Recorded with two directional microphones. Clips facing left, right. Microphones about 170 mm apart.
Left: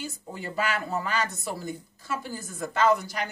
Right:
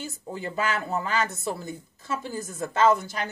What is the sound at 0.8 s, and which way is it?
A woman's voice, 25° right (ahead or behind).